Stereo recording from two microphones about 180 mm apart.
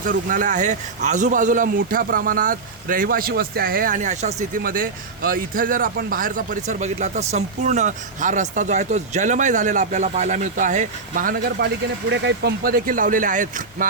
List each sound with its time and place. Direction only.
0.1 s a man's voice: 50° right (ahead or behind)
11.6 s a man's voice: 60° right (ahead or behind); by 13.8 s 45° right (ahead or behind)